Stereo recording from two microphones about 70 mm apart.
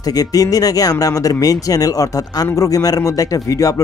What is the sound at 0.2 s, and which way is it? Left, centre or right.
Speech, left.